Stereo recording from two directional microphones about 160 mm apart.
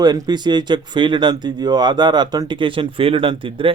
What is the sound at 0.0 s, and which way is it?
Speech, 25° right (ahead or behind).